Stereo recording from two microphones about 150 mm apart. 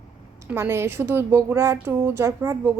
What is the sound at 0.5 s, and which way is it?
A woman's voice, 15° right (ahead or behind).